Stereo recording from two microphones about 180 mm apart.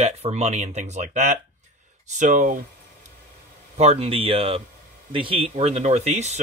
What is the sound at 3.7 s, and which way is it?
Speech, 35° right (ahead or behind).